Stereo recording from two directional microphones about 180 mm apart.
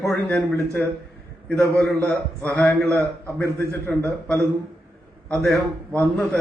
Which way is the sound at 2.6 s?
15° left (ahead or behind).